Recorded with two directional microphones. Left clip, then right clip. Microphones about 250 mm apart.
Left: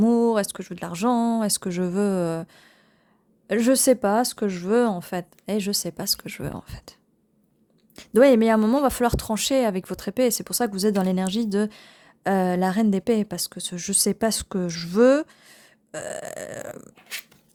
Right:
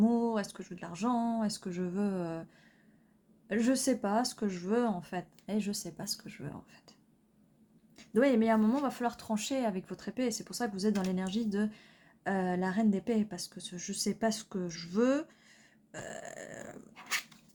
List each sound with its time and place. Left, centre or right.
0.0 s speech: left
7.9 s speech: left